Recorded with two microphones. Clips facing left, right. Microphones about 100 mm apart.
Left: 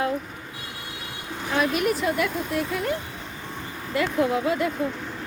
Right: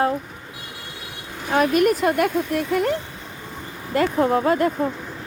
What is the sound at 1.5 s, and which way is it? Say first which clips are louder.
Speech: right 6 dB; 55° right (ahead or behind).